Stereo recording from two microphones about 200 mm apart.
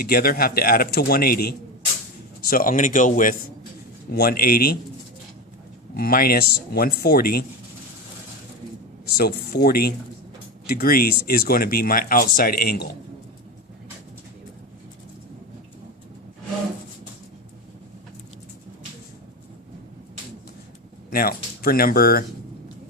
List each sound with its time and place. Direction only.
0.0 s speech: 45° left (ahead or behind)
6.0 s speech: 50° left (ahead or behind)
9.1 s speech: 50° left (ahead or behind)
21.1 s speech: 50° left (ahead or behind)